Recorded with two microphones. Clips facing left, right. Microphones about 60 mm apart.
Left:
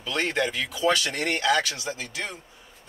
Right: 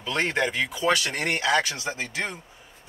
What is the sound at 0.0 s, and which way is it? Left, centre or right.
Speech, right.